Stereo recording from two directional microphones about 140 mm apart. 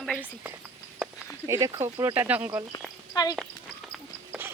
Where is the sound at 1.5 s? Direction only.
25° right (ahead or behind).